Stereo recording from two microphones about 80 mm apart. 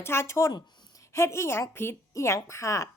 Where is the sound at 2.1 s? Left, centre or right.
Left.